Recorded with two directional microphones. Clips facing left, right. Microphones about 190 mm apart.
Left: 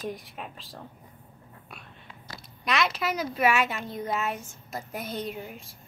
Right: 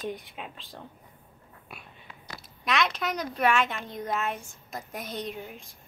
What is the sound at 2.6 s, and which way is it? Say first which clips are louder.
A woman's voice: left 1 dB; centre (ahead or behind).